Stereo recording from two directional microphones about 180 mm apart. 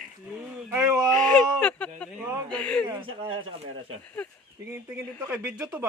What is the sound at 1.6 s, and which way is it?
Speech, 5° left (ahead or behind).